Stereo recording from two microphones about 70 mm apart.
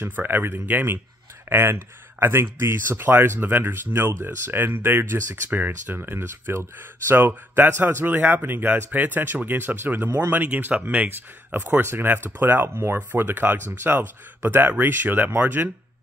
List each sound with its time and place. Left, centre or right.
0.0 s speech: right
10.0 s speech: right
10.3 s speech: right